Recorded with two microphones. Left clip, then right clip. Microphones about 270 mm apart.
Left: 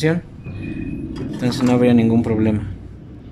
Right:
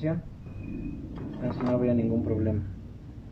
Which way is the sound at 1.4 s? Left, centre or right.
Left.